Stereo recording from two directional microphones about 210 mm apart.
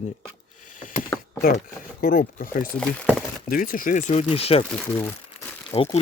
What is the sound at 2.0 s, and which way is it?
Speech, 45° left (ahead or behind).